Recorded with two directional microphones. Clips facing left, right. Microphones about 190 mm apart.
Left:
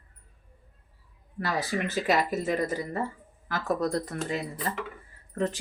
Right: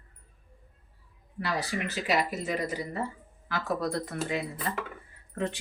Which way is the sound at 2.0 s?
45° left (ahead or behind).